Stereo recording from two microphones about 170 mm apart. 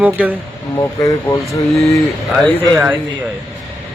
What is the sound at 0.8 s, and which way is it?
Speech, 20° left (ahead or behind).